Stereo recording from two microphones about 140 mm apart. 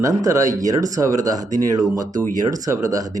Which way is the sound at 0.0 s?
25° right (ahead or behind).